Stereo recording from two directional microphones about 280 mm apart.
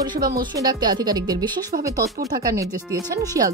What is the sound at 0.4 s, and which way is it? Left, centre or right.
A woman's voice, centre.